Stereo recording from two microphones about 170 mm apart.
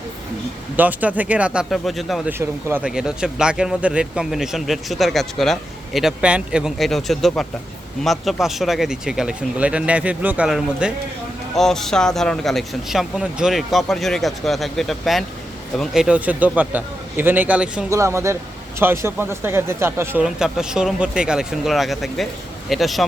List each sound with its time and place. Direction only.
0.8 s a man's voice: 10° right (ahead or behind)
2.4 s a man's voice: 15° right (ahead or behind)
20.2 s speech: 5° right (ahead or behind)